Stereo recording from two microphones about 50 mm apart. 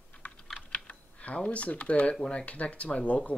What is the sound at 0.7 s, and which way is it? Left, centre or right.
Typing, left.